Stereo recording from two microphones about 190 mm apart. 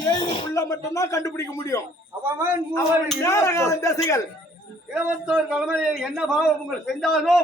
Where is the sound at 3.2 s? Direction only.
15° left (ahead or behind).